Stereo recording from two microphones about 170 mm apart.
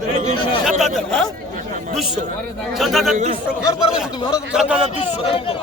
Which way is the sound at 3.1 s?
45° right (ahead or behind).